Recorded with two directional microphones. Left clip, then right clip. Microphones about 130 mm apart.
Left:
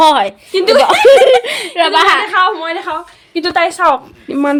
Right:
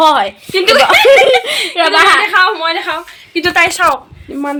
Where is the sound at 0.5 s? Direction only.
60° left (ahead or behind); by 1.1 s 85° left.